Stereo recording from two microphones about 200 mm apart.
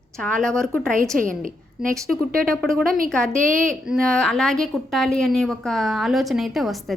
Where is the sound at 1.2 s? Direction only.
45° right (ahead or behind).